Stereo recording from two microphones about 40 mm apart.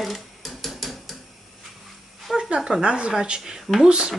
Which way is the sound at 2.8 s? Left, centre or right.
Right.